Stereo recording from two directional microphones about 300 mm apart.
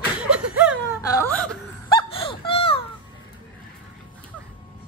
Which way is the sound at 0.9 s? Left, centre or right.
Centre.